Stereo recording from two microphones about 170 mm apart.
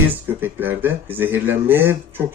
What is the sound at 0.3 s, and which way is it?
Speech, 10° right (ahead or behind).